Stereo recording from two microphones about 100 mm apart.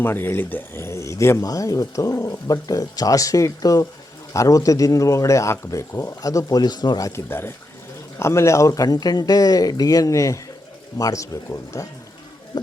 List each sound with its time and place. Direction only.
0.0 s speech: 20° left (ahead or behind); by 7.1 s 45° left (ahead or behind)
7.3 s speech: 25° left (ahead or behind)